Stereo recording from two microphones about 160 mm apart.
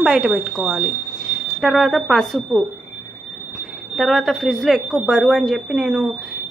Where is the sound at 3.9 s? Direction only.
Centre (ahead or behind).